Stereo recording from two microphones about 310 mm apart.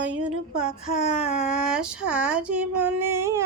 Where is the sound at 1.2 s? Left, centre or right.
Centre.